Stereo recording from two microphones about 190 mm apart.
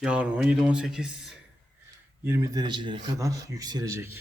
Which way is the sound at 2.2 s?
15° right (ahead or behind).